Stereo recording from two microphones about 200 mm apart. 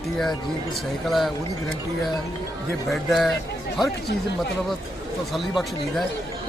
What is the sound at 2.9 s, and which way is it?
Speech, centre (ahead or behind).